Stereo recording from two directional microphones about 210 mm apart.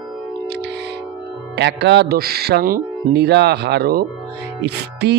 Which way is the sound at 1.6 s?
55° right (ahead or behind).